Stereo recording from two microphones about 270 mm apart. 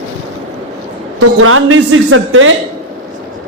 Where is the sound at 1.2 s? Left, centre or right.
Right.